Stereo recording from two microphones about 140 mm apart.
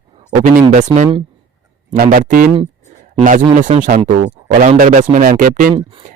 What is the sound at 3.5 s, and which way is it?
Speech, 65° right (ahead or behind).